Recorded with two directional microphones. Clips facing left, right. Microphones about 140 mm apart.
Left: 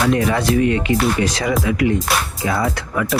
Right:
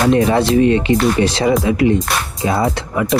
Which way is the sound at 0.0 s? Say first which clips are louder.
Right 4 dB; 30° right (ahead or behind).